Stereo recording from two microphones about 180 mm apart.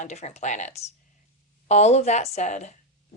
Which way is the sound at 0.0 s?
40° left (ahead or behind).